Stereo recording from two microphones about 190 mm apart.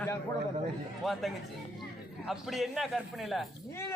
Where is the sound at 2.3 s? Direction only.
Centre (ahead or behind).